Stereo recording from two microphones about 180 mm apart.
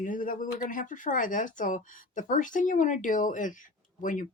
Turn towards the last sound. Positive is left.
turn(degrees=45)  # may be behind; listen again after turning